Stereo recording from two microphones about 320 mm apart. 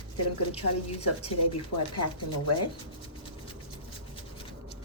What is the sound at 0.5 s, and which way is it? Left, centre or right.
Speech, centre.